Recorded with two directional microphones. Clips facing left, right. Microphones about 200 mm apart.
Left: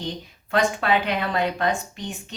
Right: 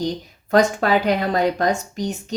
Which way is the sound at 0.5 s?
40° right (ahead or behind).